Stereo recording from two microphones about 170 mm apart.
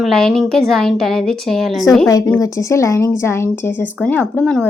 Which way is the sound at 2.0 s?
20° left (ahead or behind).